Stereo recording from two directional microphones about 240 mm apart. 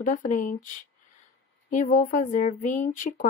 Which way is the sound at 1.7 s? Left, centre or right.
Left.